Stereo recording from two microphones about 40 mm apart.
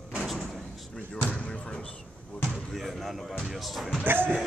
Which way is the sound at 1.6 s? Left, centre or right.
Left.